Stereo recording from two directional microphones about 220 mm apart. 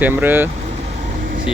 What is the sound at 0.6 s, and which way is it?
Vehicle, 35° right (ahead or behind).